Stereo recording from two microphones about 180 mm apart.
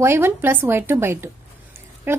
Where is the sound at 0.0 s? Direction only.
15° right (ahead or behind).